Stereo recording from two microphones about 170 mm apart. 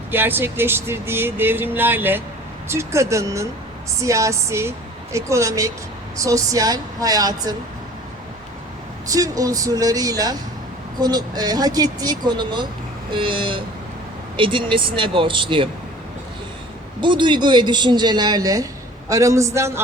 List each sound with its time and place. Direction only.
0.1 s speech: 10° right (ahead or behind)
9.0 s speech: 20° right (ahead or behind)
17.0 s speech: 30° right (ahead or behind)